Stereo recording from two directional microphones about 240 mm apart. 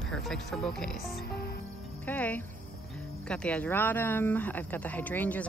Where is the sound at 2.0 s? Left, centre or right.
Centre.